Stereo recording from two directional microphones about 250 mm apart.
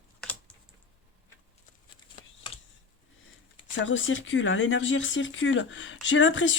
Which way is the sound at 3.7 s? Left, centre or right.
Left.